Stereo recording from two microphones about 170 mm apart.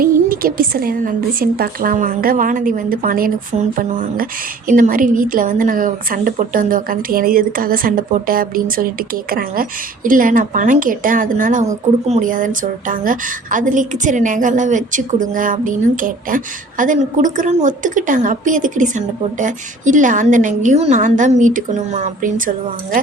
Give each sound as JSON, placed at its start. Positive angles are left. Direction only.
{"t": 0.3, "sound": "a woman's voice", "side_deg": -60}